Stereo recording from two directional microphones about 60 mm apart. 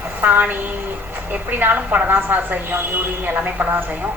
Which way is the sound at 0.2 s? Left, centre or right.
Right.